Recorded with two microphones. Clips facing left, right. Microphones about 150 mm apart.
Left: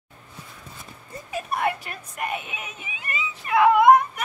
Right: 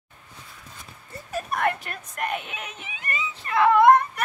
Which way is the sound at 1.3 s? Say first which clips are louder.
Even; 10° left (ahead or behind).